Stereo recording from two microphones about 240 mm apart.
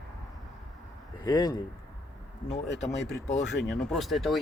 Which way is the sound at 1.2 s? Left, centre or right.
Centre.